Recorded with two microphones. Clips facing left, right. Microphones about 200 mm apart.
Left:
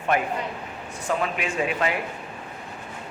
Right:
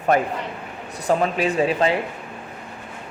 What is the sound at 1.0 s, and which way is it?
Speech, 35° right (ahead or behind).